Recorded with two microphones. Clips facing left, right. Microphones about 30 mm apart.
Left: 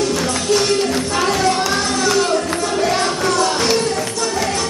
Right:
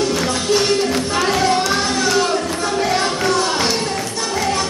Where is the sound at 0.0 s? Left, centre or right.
Centre.